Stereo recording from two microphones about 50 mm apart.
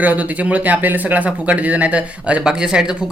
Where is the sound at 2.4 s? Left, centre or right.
Centre.